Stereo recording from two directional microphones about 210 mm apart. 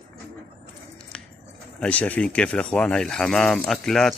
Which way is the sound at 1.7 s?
5° left (ahead or behind).